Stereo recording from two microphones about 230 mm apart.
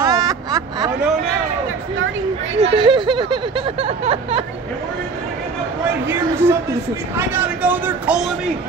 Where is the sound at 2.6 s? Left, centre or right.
Right.